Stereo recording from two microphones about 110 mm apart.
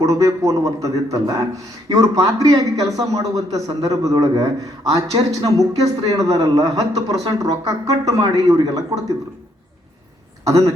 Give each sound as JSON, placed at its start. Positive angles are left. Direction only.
{"t": 0.0, "sound": "a man's voice", "side_deg": -30}
{"t": 10.4, "sound": "speech", "side_deg": -30}